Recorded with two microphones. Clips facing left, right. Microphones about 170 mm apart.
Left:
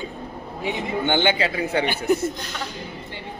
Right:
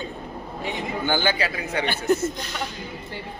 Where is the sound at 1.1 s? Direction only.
25° left (ahead or behind).